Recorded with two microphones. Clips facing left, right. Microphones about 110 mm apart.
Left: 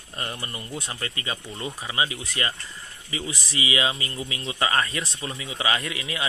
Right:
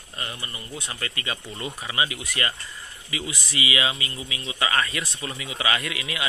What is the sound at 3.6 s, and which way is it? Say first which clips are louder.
Speech: left 1 dB; 30° left (ahead or behind).